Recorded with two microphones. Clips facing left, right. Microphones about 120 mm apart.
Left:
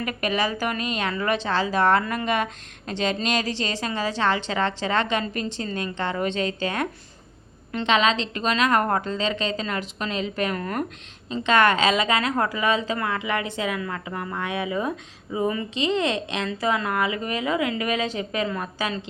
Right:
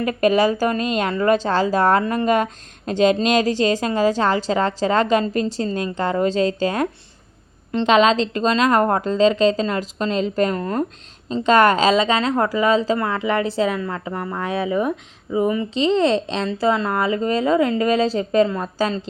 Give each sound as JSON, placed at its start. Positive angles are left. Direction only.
{"t": 0.0, "sound": "a woman's voice", "side_deg": -35}
{"t": 11.3, "sound": "a woman's voice", "side_deg": -40}
{"t": 15.8, "sound": "a woman's voice", "side_deg": -30}